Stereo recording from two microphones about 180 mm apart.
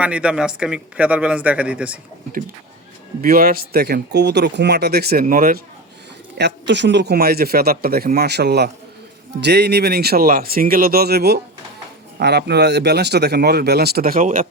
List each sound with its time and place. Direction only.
0.0 s speech: 5° right (ahead or behind)
3.2 s a man's voice: 50° right (ahead or behind)
6.3 s a man's voice: 75° right (ahead or behind); by 14.4 s 45° right (ahead or behind)